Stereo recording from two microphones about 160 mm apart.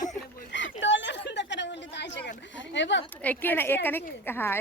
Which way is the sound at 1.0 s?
90° left.